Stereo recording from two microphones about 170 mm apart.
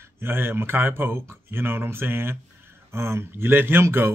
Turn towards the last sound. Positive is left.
turn(degrees=-15)  # may be behind; listen again after turning